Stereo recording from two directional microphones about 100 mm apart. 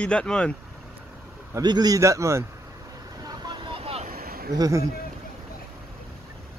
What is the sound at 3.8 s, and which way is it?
Vehicle, 85° right.